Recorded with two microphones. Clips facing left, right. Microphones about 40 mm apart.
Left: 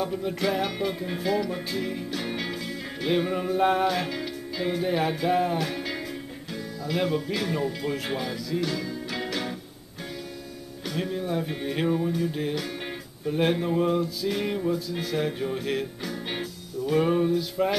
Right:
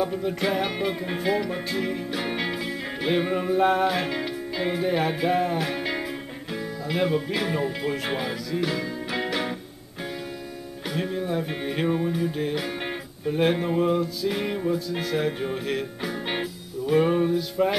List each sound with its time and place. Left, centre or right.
0.0 s music: centre
4.8 s music: centre
6.5 s speech: centre
8.5 s music: centre
10.9 s music: centre
12.3 s music: centre
16.0 s music: centre